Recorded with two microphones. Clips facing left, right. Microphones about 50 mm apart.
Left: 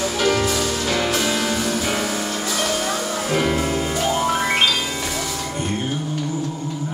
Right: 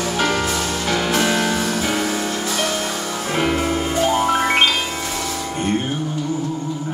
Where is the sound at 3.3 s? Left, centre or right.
Right.